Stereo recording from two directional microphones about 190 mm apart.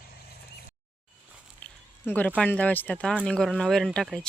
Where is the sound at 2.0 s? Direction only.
10° left (ahead or behind).